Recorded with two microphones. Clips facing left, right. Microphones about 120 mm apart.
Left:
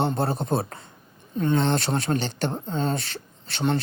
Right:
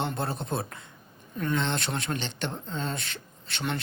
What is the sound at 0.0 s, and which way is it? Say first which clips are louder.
Speech: left 6 dB; 35° left (ahead or behind).